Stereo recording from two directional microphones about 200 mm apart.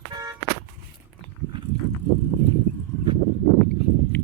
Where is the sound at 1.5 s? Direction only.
20° right (ahead or behind).